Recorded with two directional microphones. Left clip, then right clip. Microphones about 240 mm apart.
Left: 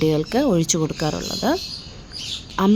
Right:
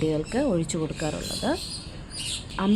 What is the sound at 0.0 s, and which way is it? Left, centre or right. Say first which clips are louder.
A woman's voice: left 6 dB; left.